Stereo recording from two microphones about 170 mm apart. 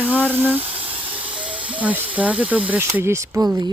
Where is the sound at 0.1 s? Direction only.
10° left (ahead or behind).